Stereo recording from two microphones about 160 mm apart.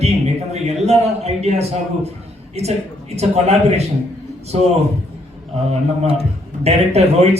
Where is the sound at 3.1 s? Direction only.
40° right (ahead or behind).